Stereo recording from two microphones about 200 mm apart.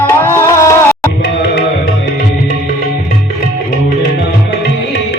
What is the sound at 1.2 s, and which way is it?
Tabla, 55° left (ahead or behind).